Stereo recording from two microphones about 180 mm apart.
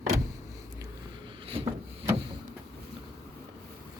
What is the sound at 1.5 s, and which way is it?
Wood, 30° right (ahead or behind).